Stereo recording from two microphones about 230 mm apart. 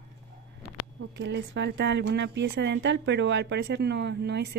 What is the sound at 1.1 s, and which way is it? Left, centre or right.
A woman's voice, right.